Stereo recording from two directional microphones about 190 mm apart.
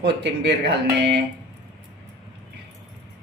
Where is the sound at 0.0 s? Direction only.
65° right (ahead or behind).